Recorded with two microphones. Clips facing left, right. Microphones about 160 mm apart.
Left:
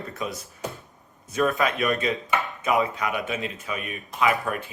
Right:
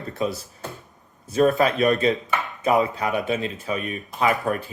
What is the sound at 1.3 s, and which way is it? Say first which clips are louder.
Speech: right 5 dB; 35° right (ahead or behind).